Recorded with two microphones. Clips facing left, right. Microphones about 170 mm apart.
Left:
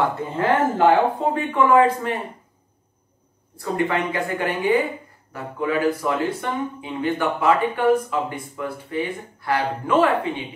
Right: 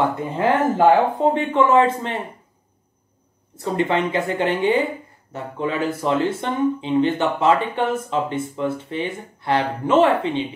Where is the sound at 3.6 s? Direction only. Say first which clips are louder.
Right 2 dB; 25° right (ahead or behind).